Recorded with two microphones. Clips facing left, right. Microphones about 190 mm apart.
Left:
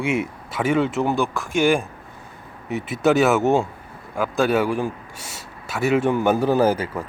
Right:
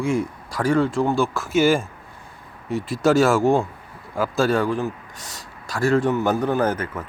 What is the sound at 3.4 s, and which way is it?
Speech, 20° left (ahead or behind).